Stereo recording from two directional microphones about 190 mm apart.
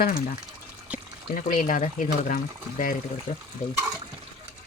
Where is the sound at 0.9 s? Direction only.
5° right (ahead or behind).